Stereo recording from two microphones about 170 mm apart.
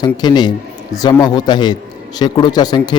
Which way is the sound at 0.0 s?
25° left (ahead or behind).